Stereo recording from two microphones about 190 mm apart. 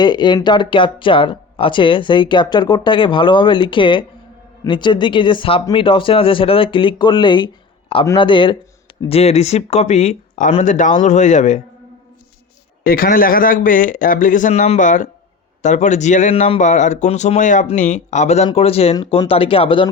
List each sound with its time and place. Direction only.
0.0 s speech: 25° left (ahead or behind); by 11.6 s 40° left (ahead or behind)
12.8 s speech: 50° left (ahead or behind); by 19.9 s 25° left (ahead or behind)